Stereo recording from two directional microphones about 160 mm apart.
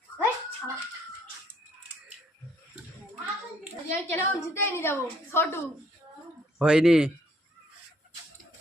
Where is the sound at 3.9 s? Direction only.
15° left (ahead or behind).